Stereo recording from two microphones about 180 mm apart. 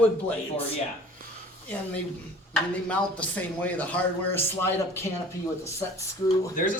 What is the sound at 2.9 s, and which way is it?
A man's voice, 10° left (ahead or behind).